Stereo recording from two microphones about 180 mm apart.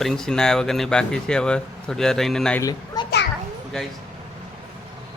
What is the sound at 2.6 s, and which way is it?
Children playing, 20° left (ahead or behind).